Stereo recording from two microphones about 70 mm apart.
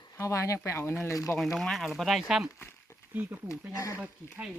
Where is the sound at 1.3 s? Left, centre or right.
Centre.